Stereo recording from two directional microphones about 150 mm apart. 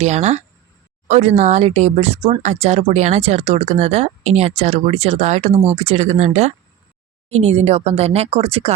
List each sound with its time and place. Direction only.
0.0 s speech: 45° right (ahead or behind)